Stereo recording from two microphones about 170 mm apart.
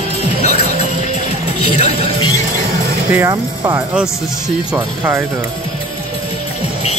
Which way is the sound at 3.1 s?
20° right (ahead or behind).